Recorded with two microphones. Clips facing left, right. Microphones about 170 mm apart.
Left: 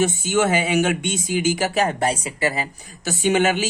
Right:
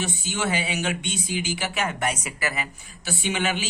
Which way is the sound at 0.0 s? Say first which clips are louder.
Left 9 dB; 45° left (ahead or behind).